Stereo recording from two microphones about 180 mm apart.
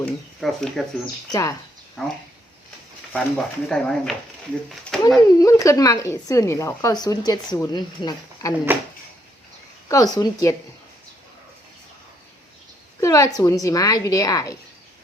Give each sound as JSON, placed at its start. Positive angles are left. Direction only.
{"t": 0.0, "sound": "speech", "side_deg": 0}
{"t": 1.3, "sound": "a woman's voice", "side_deg": 20}
{"t": 2.0, "sound": "speech", "side_deg": 0}
{"t": 4.9, "sound": "a sound", "side_deg": 0}
{"t": 5.4, "sound": "a woman's voice", "side_deg": 20}
{"t": 9.9, "sound": "a woman's voice", "side_deg": 20}
{"t": 13.0, "sound": "a woman's voice", "side_deg": 15}